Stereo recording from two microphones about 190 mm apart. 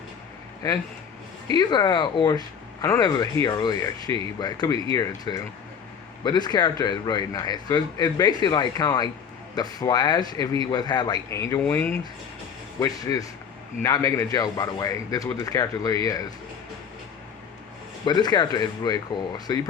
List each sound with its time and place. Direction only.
1.5 s a man's voice: 20° left (ahead or behind)
18.0 s a man's voice: 20° left (ahead or behind)